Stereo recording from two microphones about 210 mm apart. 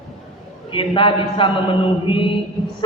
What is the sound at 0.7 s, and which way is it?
A man's voice, 25° left (ahead or behind).